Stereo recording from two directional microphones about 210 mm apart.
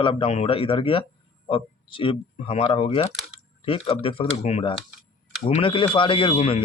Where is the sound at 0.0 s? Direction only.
25° left (ahead or behind).